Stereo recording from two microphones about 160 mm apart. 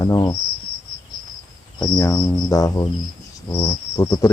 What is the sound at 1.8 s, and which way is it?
Cricket, 20° left (ahead or behind).